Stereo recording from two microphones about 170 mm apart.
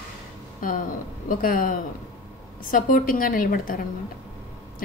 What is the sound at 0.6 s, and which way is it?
A woman's voice, 55° left (ahead or behind).